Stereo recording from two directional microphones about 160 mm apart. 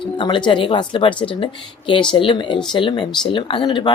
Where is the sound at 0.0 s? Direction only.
30° left (ahead or behind).